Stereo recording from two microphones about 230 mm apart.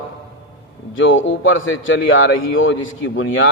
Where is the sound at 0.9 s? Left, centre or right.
Left.